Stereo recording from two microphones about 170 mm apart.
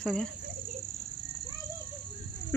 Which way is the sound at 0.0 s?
5° left (ahead or behind).